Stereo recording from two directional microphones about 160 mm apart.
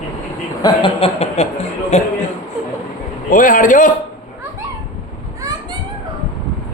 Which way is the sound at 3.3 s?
55° left (ahead or behind).